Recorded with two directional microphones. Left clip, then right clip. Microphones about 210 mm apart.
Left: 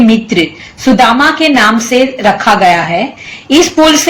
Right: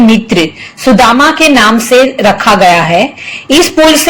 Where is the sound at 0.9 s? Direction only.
35° right (ahead or behind).